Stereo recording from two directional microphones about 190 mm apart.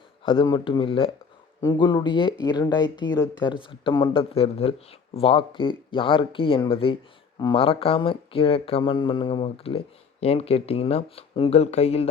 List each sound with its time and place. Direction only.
0.2 s speech: 25° left (ahead or behind)